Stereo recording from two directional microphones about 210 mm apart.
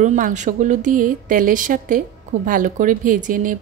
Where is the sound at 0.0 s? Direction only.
35° right (ahead or behind).